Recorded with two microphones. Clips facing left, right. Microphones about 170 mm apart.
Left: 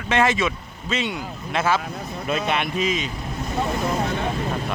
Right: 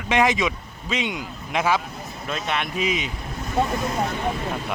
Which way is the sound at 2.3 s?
5° left (ahead or behind).